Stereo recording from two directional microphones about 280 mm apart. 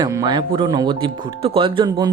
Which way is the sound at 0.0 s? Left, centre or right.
Centre.